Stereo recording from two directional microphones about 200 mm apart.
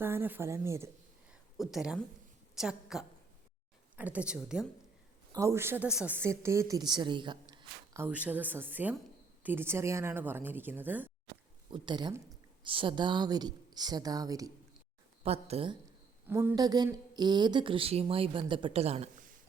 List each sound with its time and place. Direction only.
0.0 s a woman's voice: 10° right (ahead or behind)
1.3 s a sound: centre (ahead or behind)
2.6 s a woman's voice: centre (ahead or behind)
5.3 s a woman's voice: 15° right (ahead or behind)
11.7 s a woman's voice: 20° right (ahead or behind)
15.2 s speech: 30° right (ahead or behind)
16.2 s speech: 10° right (ahead or behind); by 19.3 s 30° right (ahead or behind)